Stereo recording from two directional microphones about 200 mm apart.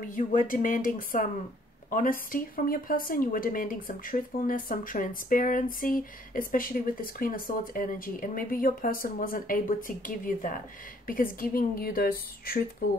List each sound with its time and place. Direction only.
0.1 s speech: 40° left (ahead or behind)